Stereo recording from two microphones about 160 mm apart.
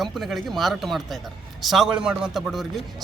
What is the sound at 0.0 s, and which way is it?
Speech, centre (ahead or behind).